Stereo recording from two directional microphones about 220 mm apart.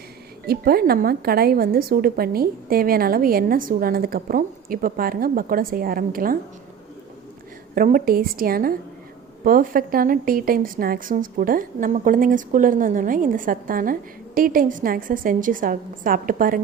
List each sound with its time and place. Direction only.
0.4 s speech: 45° right (ahead or behind)
7.8 s speech: 40° right (ahead or behind)